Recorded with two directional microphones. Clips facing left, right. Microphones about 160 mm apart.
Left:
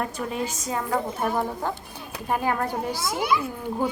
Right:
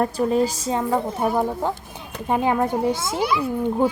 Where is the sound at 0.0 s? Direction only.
35° right (ahead or behind).